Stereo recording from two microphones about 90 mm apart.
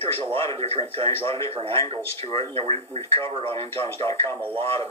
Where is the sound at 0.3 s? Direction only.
90° right.